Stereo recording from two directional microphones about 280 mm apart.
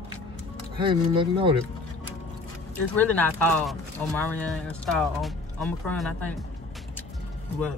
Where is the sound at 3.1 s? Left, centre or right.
Centre.